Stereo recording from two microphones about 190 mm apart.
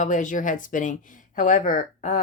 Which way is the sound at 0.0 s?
40° left (ahead or behind).